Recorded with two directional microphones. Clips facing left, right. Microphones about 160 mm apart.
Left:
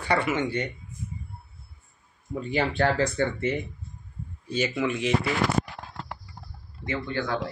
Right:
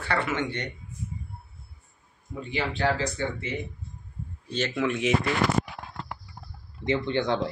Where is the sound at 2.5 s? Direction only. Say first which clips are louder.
Left 2 dB; 50° left (ahead or behind).